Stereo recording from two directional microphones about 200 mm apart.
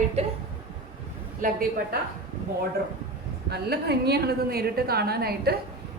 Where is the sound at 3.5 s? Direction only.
55° right (ahead or behind).